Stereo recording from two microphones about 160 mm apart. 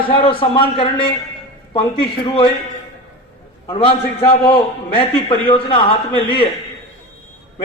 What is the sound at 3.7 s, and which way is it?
Speech, 35° left (ahead or behind).